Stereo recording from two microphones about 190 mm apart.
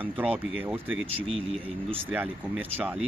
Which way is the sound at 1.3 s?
30° right (ahead or behind).